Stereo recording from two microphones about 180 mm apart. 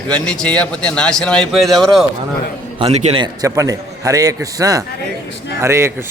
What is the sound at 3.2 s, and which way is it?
A man's voice, 20° right (ahead or behind).